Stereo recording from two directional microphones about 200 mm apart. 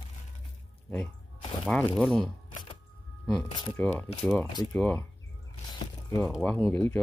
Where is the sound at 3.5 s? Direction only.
25° left (ahead or behind).